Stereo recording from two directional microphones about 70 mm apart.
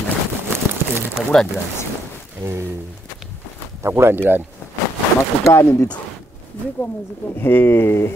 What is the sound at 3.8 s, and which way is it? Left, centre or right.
Speech, right.